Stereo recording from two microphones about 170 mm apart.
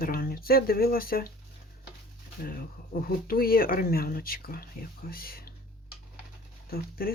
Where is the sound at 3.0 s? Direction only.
60° left (ahead or behind).